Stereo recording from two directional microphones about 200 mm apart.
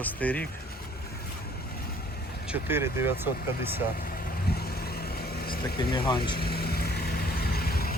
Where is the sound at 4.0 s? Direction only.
45° left (ahead or behind).